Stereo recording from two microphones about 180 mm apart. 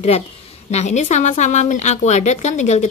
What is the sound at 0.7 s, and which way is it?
A woman's voice, 40° left (ahead or behind).